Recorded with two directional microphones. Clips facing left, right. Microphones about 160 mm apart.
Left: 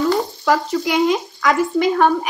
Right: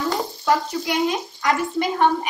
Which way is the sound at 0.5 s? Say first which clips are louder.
Left 3 dB; 90° left.